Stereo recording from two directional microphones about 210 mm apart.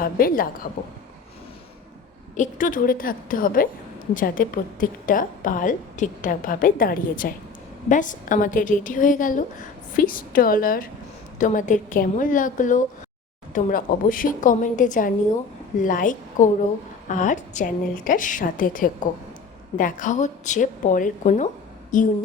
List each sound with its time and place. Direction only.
0.0 s a woman's voice: 45° left (ahead or behind)
2.3 s a woman's voice: 40° left (ahead or behind)